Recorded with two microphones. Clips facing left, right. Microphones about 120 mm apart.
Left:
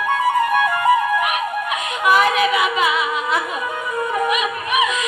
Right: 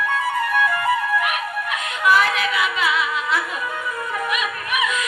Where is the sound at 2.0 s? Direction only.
20° left (ahead or behind).